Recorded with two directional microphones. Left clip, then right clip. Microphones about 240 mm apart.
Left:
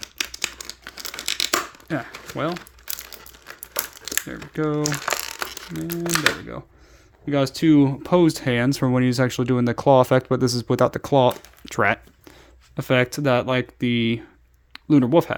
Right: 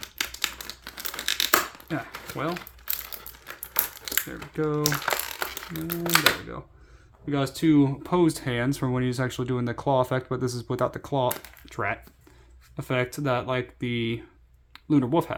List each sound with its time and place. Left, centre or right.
0.4 s a sound: centre
2.3 s speech: left
3.7 s crumpling: centre
4.3 s speech: left
4.8 s crumpling: centre
5.8 s speech: centre
7.3 s speech: left